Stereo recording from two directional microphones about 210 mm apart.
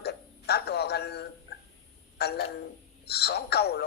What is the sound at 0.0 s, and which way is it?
Hiccup, 50° left (ahead or behind).